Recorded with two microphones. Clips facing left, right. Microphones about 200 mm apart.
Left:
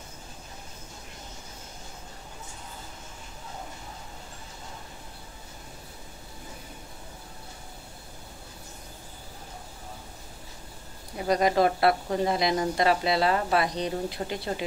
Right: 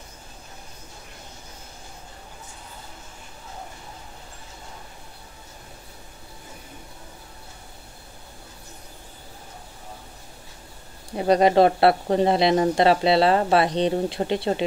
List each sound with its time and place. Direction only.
11.1 s speech: 25° right (ahead or behind)